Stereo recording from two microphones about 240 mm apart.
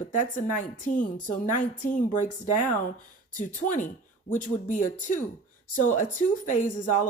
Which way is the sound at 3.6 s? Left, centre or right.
Left.